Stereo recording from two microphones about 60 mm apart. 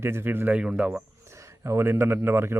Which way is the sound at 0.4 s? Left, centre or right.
Right.